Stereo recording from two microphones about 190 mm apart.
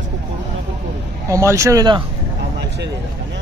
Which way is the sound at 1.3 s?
15° right (ahead or behind).